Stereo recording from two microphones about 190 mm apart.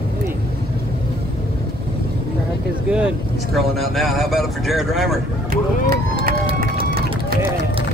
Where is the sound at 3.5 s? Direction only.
Centre (ahead or behind).